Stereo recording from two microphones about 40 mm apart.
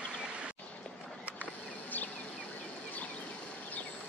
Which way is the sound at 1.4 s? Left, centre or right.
Left.